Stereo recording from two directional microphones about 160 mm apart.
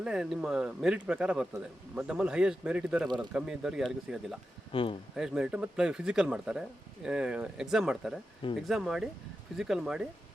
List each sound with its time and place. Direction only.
0.0 s speech: 5° right (ahead or behind)
4.7 s speech: 35° left (ahead or behind)
5.1 s speech: 5° right (ahead or behind)